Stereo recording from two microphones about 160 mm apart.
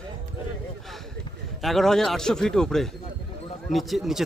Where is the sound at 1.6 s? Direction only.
Centre (ahead or behind).